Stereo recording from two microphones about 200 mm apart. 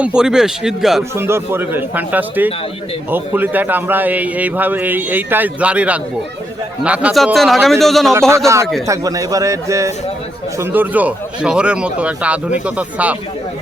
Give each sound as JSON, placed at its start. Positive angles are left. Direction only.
{"t": 0.0, "sound": "a man's voice", "side_deg": -5}
{"t": 1.1, "sound": "a man's voice", "side_deg": -10}
{"t": 8.9, "sound": "a man's voice", "side_deg": -15}